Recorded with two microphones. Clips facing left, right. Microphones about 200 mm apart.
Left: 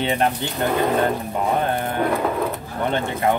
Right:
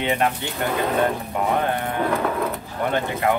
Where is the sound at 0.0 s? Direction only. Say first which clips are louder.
Left 1 dB; 30° left (ahead or behind).